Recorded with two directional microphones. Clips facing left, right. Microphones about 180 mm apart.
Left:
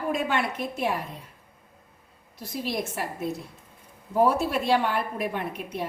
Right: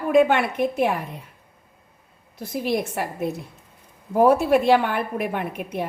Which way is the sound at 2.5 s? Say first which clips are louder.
Right 6 dB; 55° right (ahead or behind).